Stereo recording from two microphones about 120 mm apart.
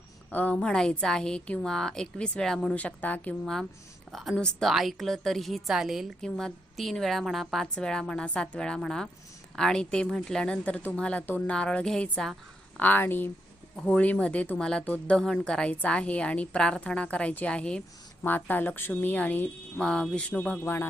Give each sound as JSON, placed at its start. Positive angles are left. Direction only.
{"t": 0.3, "sound": "a woman's voice", "side_deg": 10}